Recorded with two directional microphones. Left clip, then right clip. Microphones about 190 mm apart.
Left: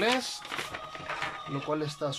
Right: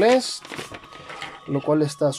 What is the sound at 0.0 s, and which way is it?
Speech, 40° right (ahead or behind).